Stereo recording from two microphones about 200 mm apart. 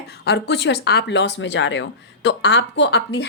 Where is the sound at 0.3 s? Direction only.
60° left (ahead or behind).